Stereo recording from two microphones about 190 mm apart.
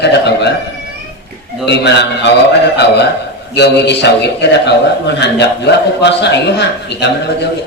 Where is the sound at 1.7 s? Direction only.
65° left (ahead or behind).